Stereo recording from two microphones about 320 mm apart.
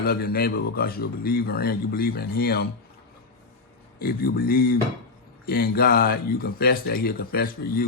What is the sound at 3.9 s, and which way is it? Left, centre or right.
A man's voice, left.